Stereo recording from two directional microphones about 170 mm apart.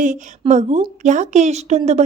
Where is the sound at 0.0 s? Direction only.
45° right (ahead or behind).